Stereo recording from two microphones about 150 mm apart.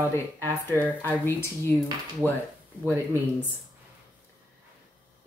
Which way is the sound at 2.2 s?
15° right (ahead or behind).